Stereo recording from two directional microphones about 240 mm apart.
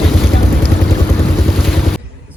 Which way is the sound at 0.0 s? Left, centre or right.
Centre.